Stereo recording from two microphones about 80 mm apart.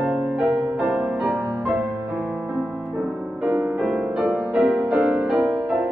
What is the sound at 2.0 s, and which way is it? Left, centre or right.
Music, centre.